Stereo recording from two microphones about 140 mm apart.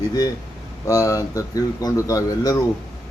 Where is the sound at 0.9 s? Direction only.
25° left (ahead or behind).